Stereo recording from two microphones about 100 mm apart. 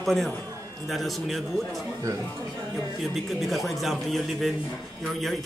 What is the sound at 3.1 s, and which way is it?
A man's voice, centre (ahead or behind).